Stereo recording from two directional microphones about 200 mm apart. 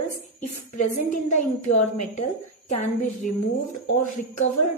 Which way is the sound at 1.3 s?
35° left (ahead or behind).